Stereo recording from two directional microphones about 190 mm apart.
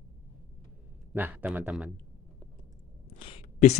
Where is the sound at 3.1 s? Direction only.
30° left (ahead or behind).